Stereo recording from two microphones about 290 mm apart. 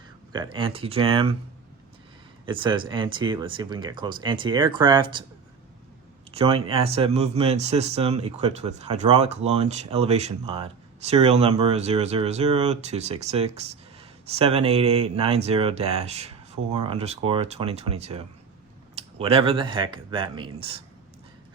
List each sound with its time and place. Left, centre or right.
0.3 s speech: centre
2.5 s speech: centre
6.3 s speech: centre